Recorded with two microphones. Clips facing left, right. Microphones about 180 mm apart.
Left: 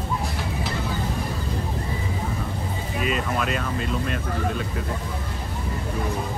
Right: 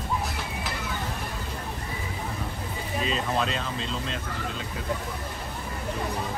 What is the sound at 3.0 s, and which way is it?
Speech, 30° right (ahead or behind).